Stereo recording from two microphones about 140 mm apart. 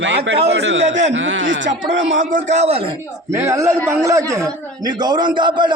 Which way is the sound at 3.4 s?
20° right (ahead or behind).